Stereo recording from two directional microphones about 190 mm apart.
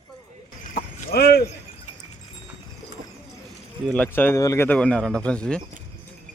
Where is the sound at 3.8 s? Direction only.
5° left (ahead or behind).